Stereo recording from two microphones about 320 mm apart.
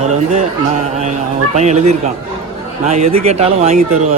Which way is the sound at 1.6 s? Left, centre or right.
Right.